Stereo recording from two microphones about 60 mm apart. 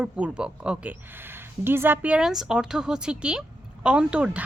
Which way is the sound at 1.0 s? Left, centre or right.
Right.